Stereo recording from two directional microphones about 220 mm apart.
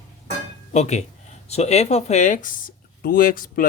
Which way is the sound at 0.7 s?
30° left (ahead or behind).